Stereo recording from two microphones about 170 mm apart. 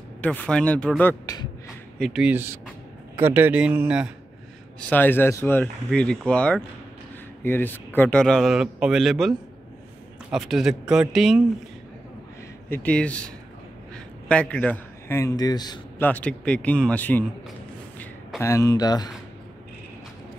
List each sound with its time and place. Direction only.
0.2 s speech: 10° left (ahead or behind)
1.2 s speech: 20° left (ahead or behind)
2.0 s a man's voice: centre (ahead or behind)
4.7 s speech: 10° left (ahead or behind)
10.3 s speech: centre (ahead or behind)
12.6 s a man's voice: 10° left (ahead or behind)
16.0 s speech: 10° left (ahead or behind)
18.4 s speech: 20° left (ahead or behind)